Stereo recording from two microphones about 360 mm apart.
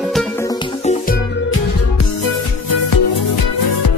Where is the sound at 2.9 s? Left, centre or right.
Left.